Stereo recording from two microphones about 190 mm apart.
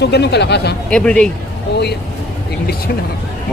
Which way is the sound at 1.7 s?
60° left (ahead or behind).